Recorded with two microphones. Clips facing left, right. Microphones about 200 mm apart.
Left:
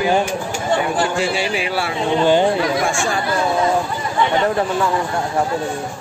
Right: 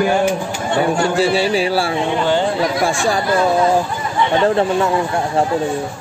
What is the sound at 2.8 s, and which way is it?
Speech, 35° right (ahead or behind).